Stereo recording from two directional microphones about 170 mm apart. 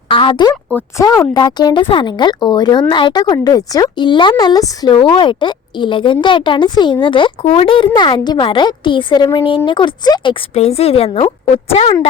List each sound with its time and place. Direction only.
0.1 s a woman's voice: 30° left (ahead or behind)
10.5 s a woman's voice: 40° left (ahead or behind)